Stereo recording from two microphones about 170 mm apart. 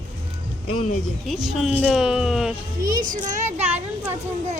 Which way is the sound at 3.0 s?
50° right (ahead or behind).